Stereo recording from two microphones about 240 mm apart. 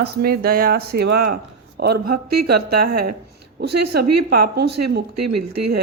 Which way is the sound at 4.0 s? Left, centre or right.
Right.